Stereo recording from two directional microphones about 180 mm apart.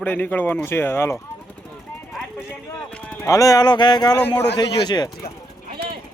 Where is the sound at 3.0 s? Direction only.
10° left (ahead or behind).